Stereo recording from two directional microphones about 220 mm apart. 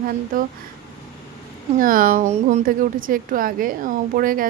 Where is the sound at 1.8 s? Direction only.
40° right (ahead or behind).